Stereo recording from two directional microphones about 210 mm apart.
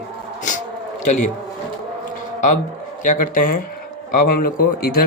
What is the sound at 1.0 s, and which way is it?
Speech, 35° left (ahead or behind).